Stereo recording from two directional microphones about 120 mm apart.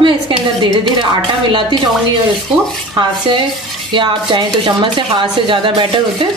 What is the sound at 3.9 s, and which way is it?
Speech, 40° right (ahead or behind).